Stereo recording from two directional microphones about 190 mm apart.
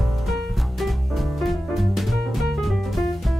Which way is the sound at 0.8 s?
Centre (ahead or behind).